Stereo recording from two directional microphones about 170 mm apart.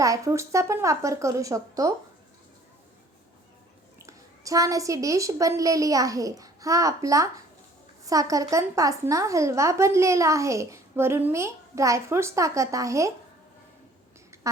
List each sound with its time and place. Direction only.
0.0 s speech: 20° right (ahead or behind)
4.0 s a woman's voice: 20° right (ahead or behind)